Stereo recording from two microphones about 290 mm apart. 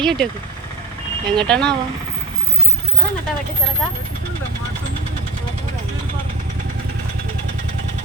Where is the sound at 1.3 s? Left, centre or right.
Centre.